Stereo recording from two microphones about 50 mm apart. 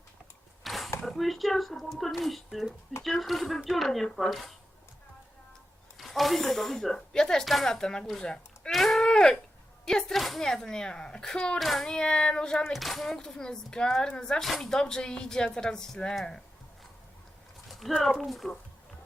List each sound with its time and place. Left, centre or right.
0.6 s a sound: centre
1.0 s speech: centre
6.0 s speech: centre
8.7 s a sound: centre
9.8 s speech: centre
11.6 s speech: centre
11.9 s speech: centre
12.6 s speech: centre
13.1 s speech: centre
14.4 s speech: centre
17.7 s a sound: centre
18.3 s speech: centre